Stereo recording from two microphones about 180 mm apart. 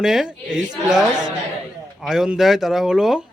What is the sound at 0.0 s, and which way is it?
Speech, centre (ahead or behind).